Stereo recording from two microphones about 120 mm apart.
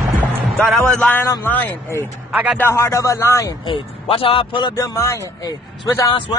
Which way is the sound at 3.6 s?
50° left (ahead or behind).